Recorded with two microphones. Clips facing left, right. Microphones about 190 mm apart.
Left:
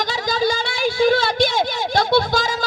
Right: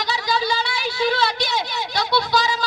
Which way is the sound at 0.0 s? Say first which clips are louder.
Left 3 dB; 45° left (ahead or behind).